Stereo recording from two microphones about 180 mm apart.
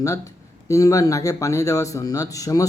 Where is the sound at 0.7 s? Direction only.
20° left (ahead or behind).